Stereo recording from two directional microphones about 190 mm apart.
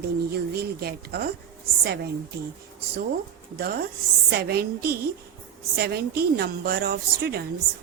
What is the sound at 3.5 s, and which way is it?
A woman's voice, 55° right (ahead or behind).